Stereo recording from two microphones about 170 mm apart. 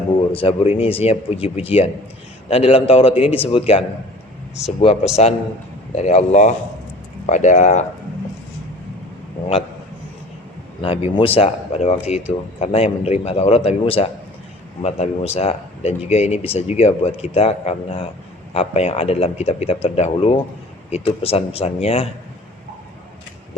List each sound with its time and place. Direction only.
0.3 s speech: 35° left (ahead or behind)
10.8 s speech: 35° left (ahead or behind)